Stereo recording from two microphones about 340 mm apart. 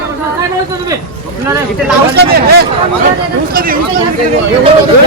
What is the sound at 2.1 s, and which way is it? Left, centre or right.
Speech, right.